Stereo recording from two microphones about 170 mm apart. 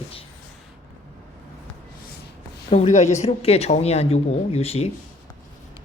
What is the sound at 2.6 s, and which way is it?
A woman's voice, 40° left (ahead or behind).